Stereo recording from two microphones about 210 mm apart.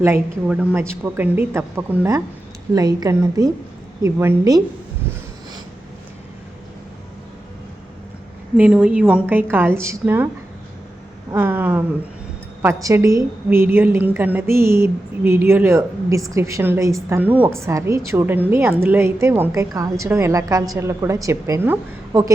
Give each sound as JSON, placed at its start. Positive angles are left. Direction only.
{"t": 0.0, "sound": "a woman's voice", "side_deg": -10}
{"t": 8.5, "sound": "a woman's voice", "side_deg": -5}
{"t": 11.3, "sound": "a woman's voice", "side_deg": -10}